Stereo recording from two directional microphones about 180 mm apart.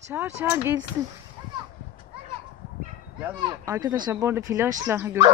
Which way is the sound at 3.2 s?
20° right (ahead or behind).